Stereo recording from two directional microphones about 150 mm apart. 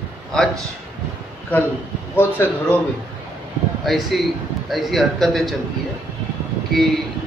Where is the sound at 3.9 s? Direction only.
Centre (ahead or behind).